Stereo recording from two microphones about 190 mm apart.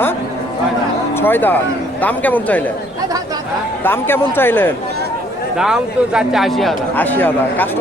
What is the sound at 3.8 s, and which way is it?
Speech, 10° left (ahead or behind).